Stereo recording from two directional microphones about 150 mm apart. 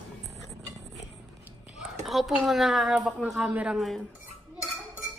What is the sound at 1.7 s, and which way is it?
A woman's voice, centre (ahead or behind).